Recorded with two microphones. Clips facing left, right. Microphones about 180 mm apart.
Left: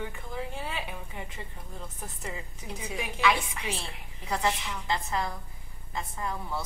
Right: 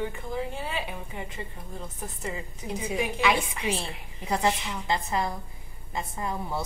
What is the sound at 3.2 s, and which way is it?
A woman's voice, 15° right (ahead or behind).